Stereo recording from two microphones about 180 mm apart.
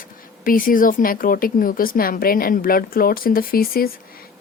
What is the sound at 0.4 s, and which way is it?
A woman's voice, 50° left (ahead or behind).